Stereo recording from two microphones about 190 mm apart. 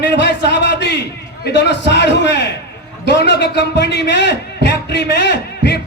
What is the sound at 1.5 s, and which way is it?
Music, 65° left (ahead or behind).